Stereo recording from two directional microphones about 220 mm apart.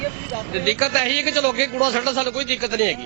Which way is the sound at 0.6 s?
10° right (ahead or behind).